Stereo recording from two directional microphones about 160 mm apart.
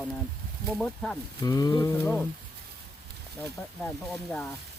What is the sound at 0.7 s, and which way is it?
Speech, 5° left (ahead or behind).